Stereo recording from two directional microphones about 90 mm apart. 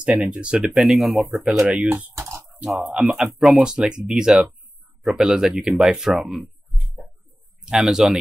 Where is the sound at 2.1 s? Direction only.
30° right (ahead or behind).